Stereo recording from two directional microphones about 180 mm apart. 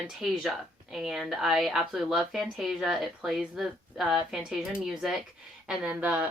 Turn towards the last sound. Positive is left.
turn(degrees=-10)  # may be behind; listen again after turning